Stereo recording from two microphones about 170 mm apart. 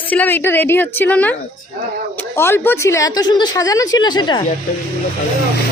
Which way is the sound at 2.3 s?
15° left (ahead or behind).